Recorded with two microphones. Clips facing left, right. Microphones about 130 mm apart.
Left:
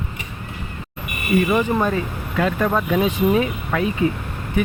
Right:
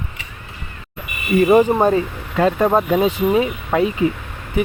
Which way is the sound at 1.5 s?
40° right (ahead or behind).